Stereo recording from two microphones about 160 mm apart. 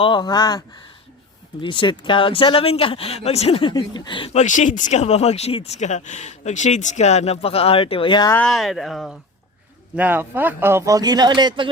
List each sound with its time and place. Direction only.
0.0 s speech: 30° left (ahead or behind)
1.6 s speech: 30° left (ahead or behind)
4.3 s speech: 50° left (ahead or behind); by 8.3 s 30° left (ahead or behind)
8.4 s speech: centre (ahead or behind)
9.9 s speech: 10° right (ahead or behind); by 11.7 s 30° right (ahead or behind)